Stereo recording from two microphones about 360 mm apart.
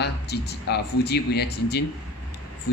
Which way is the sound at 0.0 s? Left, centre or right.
Left.